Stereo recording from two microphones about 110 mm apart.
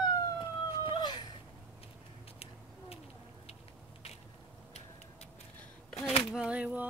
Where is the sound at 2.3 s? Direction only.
65° left (ahead or behind).